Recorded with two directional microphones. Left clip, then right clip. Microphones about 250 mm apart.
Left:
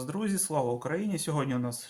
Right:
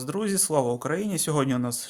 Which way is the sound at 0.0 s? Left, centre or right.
Right.